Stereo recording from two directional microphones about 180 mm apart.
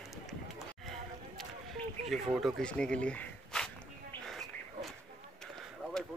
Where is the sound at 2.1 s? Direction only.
Centre (ahead or behind).